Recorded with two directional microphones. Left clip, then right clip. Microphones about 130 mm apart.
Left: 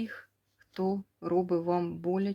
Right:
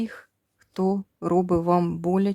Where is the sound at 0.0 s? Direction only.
50° right (ahead or behind).